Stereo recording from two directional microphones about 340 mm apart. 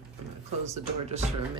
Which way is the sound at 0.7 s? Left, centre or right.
Centre.